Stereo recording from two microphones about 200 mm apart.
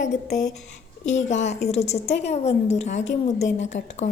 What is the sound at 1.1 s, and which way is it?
A woman's voice, 35° left (ahead or behind).